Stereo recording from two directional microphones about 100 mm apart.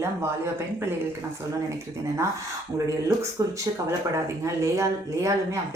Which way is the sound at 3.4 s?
30° right (ahead or behind).